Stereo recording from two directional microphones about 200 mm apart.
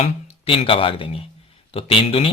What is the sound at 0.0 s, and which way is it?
Speech, 30° left (ahead or behind).